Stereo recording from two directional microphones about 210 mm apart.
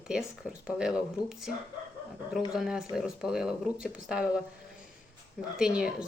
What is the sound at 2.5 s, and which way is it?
Speech, 5° right (ahead or behind).